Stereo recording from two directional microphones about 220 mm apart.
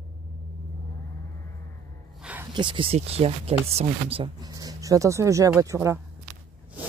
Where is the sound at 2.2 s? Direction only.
5° right (ahead or behind).